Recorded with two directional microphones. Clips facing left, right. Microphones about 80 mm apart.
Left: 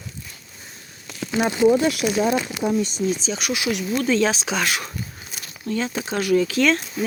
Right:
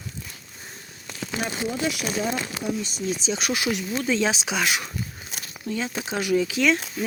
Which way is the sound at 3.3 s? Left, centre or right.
Right.